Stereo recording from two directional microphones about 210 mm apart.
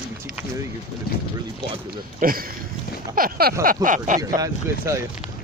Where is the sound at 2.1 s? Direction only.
45° right (ahead or behind).